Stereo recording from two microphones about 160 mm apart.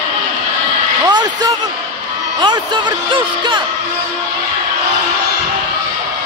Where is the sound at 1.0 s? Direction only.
25° right (ahead or behind).